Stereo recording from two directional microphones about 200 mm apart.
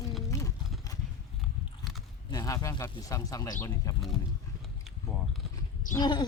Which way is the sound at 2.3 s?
20° left (ahead or behind).